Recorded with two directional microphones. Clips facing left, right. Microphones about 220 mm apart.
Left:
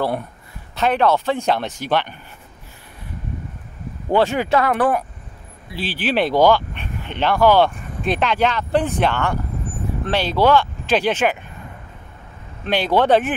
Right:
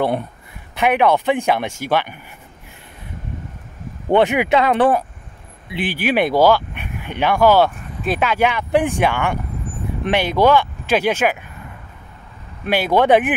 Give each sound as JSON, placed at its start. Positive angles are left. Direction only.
{"t": 0.7, "sound": "speech", "side_deg": -15}
{"t": 4.1, "sound": "speech", "side_deg": -20}
{"t": 5.7, "sound": "speech", "side_deg": -15}
{"t": 12.6, "sound": "speech", "side_deg": -10}